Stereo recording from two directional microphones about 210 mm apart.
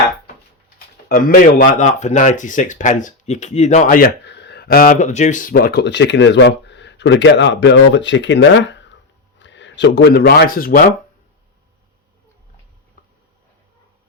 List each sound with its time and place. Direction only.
1.0 s speech: 40° left (ahead or behind)